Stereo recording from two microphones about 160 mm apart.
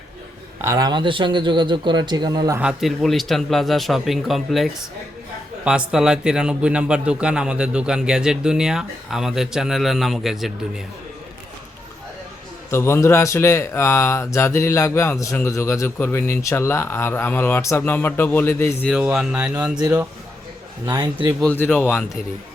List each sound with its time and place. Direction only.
0.6 s speech: 20° right (ahead or behind)
2.6 s a man's voice: 5° right (ahead or behind)
12.7 s speech: 15° left (ahead or behind)
18.9 s a man's voice: 5° right (ahead or behind)
20.8 s speech: 25° right (ahead or behind)
21.4 s speech: 10° left (ahead or behind)